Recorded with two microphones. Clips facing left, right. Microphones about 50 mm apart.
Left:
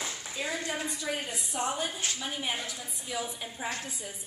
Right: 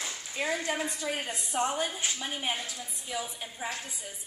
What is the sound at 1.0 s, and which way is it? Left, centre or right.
Speech, centre.